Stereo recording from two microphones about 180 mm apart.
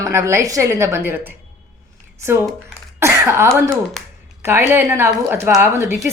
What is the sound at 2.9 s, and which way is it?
A woman's voice, 15° right (ahead or behind).